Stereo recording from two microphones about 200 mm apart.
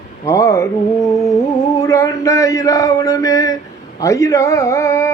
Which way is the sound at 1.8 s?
15° left (ahead or behind).